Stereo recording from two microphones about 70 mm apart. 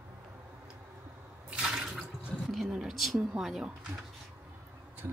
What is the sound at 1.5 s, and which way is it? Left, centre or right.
Water, centre.